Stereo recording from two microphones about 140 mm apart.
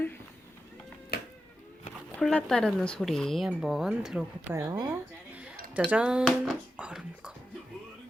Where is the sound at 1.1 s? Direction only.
90° left.